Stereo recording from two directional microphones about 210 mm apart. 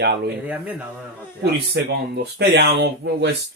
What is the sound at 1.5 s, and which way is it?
Speech, 50° right (ahead or behind).